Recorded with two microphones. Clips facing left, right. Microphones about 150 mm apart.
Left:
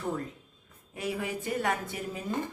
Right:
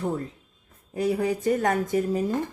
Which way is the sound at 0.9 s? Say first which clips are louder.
Right 9 dB; 40° right (ahead or behind).